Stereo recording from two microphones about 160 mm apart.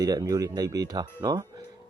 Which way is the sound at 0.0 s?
25° right (ahead or behind).